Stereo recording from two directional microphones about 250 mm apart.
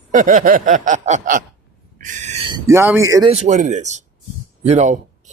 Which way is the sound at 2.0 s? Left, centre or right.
Right.